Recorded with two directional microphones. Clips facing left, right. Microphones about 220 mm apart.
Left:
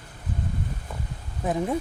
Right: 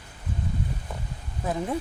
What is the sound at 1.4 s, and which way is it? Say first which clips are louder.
Speech: left 3 dB; 20° left (ahead or behind).